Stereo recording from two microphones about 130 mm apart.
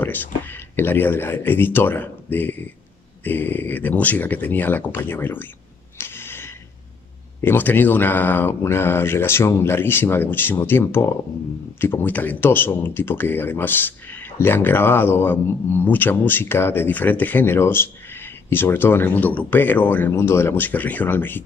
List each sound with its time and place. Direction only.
0.0 s speech: 15° left (ahead or behind)
5.9 s a sound: 20° left (ahead or behind)
7.4 s speech: 15° left (ahead or behind)